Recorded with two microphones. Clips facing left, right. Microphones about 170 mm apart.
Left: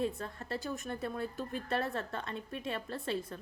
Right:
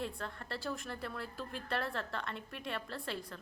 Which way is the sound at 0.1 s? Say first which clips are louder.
Left 3 dB; 20° left (ahead or behind).